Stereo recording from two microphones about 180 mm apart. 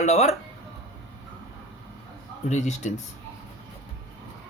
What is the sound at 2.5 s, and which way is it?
Speech, 40° left (ahead or behind).